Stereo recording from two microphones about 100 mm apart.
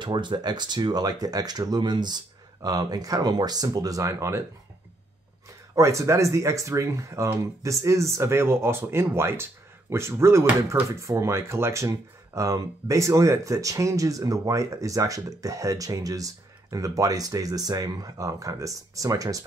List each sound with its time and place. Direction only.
0.0 s speech: 50° right (ahead or behind); by 4.5 s 30° right (ahead or behind)
5.8 s speech: 30° right (ahead or behind)